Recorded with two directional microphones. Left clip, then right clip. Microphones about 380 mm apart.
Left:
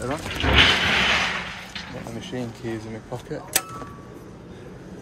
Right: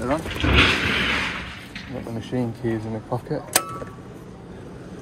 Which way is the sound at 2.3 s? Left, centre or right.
Right.